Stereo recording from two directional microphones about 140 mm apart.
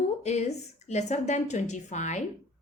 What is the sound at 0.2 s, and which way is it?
A woman's voice, 55° left (ahead or behind).